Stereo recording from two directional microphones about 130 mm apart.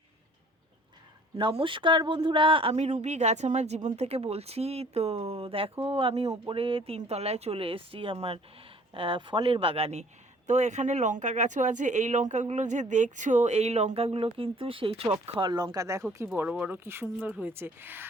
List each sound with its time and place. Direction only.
1.4 s speech: 40° right (ahead or behind); by 18.1 s 15° right (ahead or behind)